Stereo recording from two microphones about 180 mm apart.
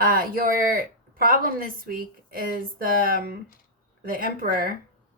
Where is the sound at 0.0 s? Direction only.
55° right (ahead or behind).